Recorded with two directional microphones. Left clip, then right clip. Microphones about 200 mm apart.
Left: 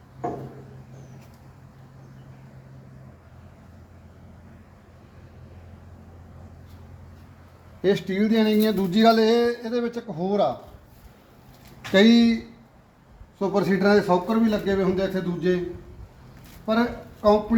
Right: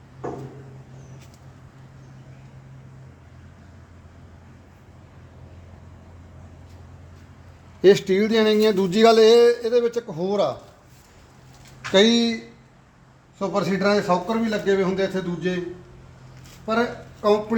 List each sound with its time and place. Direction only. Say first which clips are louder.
7.8 s speech: right 7 dB; 55° right (ahead or behind)
11.9 s speech: right 1 dB; 15° right (ahead or behind)
13.4 s a man's voice: even; 25° right (ahead or behind)
16.7 s a man's voice: right 1 dB; 25° right (ahead or behind)